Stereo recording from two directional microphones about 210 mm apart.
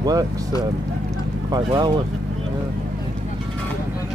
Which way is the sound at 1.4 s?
20° right (ahead or behind).